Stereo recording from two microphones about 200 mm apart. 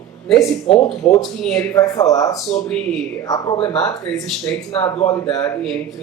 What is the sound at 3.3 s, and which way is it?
Speech, 20° left (ahead or behind).